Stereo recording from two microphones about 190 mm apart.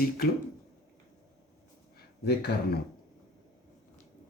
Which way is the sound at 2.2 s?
60° left (ahead or behind).